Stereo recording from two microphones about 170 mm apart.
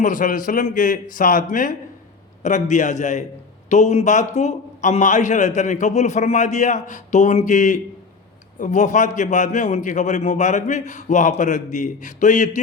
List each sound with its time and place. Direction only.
0.0 s a man's voice: 50° left (ahead or behind)